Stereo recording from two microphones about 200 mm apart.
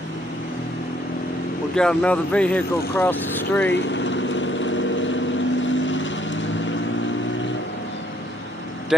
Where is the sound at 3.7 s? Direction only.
65° left (ahead or behind).